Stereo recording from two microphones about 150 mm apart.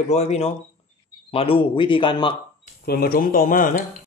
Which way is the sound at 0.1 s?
45° left (ahead or behind).